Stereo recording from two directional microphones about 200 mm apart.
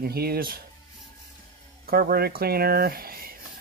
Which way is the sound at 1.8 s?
50° right (ahead or behind).